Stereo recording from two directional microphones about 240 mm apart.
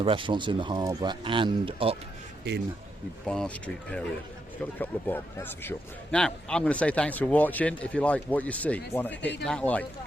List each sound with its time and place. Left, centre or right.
0.0 s speech: right
2.5 s speech: right
3.2 s a man's voice: centre